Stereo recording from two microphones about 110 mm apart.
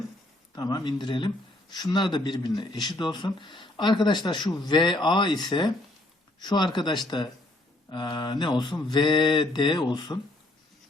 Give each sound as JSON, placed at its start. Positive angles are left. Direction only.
{"t": 0.5, "sound": "speech", "side_deg": 35}